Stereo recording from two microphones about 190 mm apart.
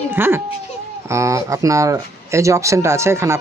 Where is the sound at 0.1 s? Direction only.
10° right (ahead or behind).